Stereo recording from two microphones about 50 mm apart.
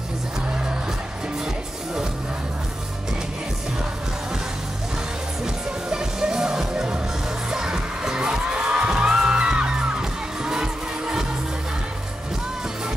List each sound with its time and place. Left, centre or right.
5.4 s music: centre